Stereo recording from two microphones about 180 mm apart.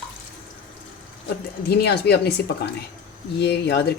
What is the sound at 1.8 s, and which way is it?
A woman's voice, 65° left (ahead or behind).